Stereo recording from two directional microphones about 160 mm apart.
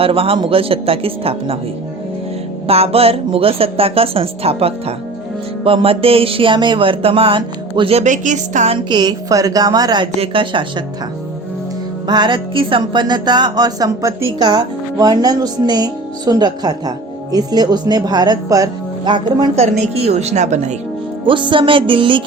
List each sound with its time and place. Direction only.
0.0 s music: 35° right (ahead or behind)
2.6 s music: 40° right (ahead or behind)
8.9 s a woman's voice: 25° right (ahead or behind)
10.2 s music: 30° right (ahead or behind)
12.0 s a woman's voice: 25° right (ahead or behind)
19.8 s speech: 45° right (ahead or behind)
21.2 s music: 30° right (ahead or behind)